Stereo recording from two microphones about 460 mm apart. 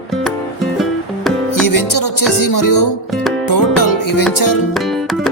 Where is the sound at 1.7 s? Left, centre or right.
Left.